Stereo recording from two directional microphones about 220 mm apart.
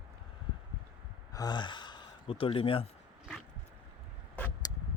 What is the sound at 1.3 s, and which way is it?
Gasp, 15° left (ahead or behind).